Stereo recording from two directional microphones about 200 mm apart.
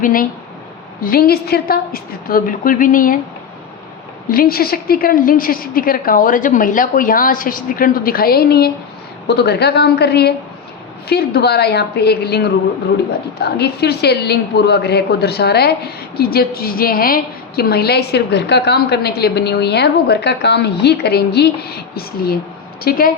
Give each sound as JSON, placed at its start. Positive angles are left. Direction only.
{"t": 0.0, "sound": "a woman's voice", "side_deg": 45}
{"t": 4.3, "sound": "a woman's voice", "side_deg": 50}